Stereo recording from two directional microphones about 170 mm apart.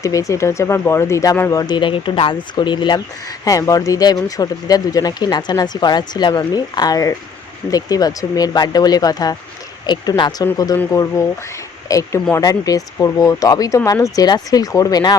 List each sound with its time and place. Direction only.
0.0 s speech: 20° left (ahead or behind)